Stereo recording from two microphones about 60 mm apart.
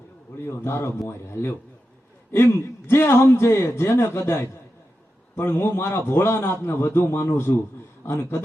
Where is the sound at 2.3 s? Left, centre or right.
Left.